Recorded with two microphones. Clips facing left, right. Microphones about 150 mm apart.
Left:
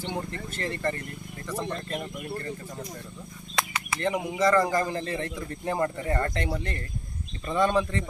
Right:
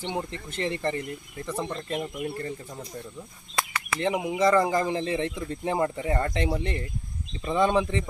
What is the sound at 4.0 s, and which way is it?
Speech, 15° right (ahead or behind).